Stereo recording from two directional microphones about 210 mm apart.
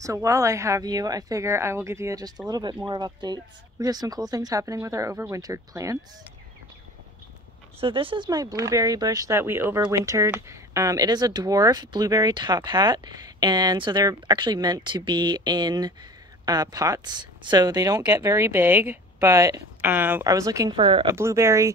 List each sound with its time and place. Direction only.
0.0 s speech: 15° right (ahead or behind)
7.8 s speech: 25° right (ahead or behind)
21.2 s speech: 15° right (ahead or behind)